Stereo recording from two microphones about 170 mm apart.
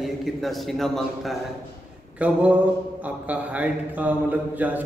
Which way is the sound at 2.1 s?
10° right (ahead or behind).